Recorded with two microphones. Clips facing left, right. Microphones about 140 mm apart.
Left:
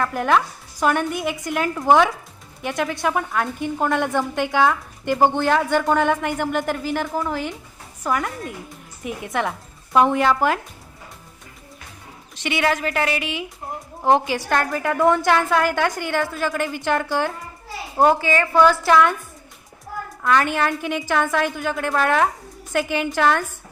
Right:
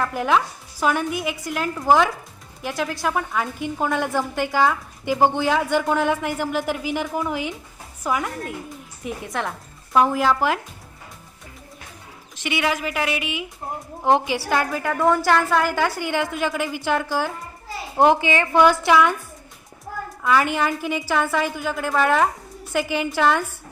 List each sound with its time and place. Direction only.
0.0 s a woman's voice: centre (ahead or behind)
12.4 s a woman's voice: 5° right (ahead or behind)
18.1 s a woman's voice: 20° right (ahead or behind)
18.9 s a woman's voice: 5° right (ahead or behind)
20.2 s a woman's voice: 10° right (ahead or behind)